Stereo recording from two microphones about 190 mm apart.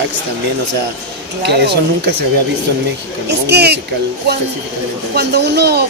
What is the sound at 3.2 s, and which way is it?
Speech, 60° right (ahead or behind).